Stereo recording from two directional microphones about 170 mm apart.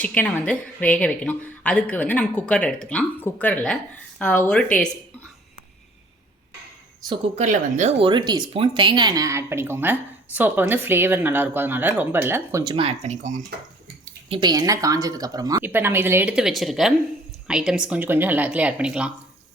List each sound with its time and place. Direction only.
0.0 s a woman's voice: 10° left (ahead or behind)
7.3 s speech: 45° right (ahead or behind)
8.0 s speech: 25° right (ahead or behind)
12.7 s speech: 35° right (ahead or behind)
14.3 s speech: 30° right (ahead or behind); by 19.1 s 5° right (ahead or behind)